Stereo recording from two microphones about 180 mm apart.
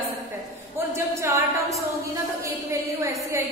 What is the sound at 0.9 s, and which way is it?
Speech, 15° right (ahead or behind).